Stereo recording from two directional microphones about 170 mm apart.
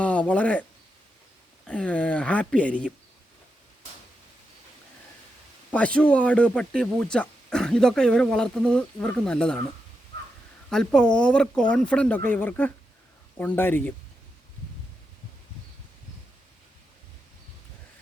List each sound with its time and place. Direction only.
0.0 s a sound: 5° left (ahead or behind)
1.6 s speech: 5° left (ahead or behind)
5.7 s speech: 5° left (ahead or behind)
10.7 s speech: 5° left (ahead or behind)